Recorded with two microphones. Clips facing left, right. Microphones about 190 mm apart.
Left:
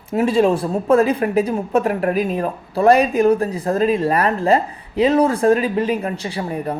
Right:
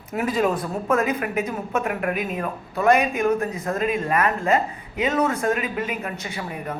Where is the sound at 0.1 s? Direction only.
30° left (ahead or behind).